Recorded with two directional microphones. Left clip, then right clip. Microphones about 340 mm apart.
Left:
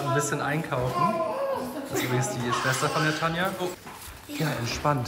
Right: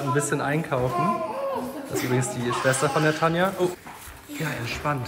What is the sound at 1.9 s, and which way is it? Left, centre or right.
A woman's voice, centre.